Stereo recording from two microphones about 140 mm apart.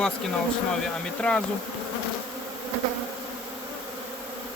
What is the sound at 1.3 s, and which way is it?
Speech, 10° left (ahead or behind).